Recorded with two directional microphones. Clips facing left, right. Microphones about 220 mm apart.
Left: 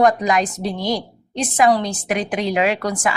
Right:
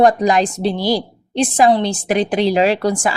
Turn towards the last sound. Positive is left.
turn(degrees=-30)  # may be behind; listen again after turning